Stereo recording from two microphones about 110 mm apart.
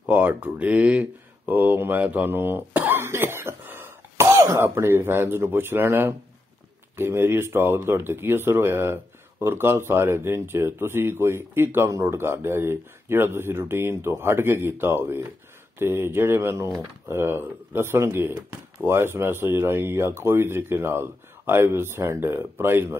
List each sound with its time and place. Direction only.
0.0 s speech: 15° right (ahead or behind)